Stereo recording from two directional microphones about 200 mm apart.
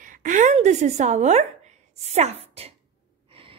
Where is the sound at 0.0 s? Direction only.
40° right (ahead or behind).